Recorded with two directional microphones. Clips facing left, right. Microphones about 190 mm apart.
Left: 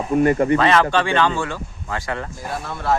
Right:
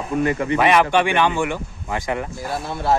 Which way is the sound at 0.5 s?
15° right (ahead or behind).